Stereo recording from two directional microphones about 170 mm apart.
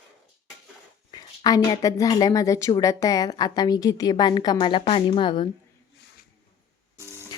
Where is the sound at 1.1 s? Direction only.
25° left (ahead or behind).